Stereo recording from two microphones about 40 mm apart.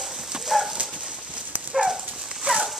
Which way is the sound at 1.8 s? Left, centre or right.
Centre.